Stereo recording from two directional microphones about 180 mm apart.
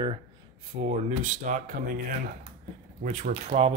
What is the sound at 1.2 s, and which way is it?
Speech, 45° right (ahead or behind).